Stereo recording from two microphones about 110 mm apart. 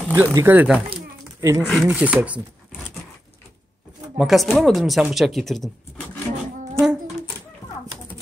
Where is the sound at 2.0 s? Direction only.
10° right (ahead or behind).